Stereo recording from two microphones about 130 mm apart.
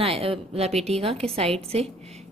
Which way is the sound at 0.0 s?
45° right (ahead or behind).